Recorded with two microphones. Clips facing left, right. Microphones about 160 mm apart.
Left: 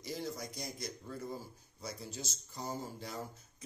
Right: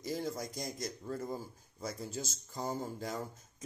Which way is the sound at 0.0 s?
45° right (ahead or behind).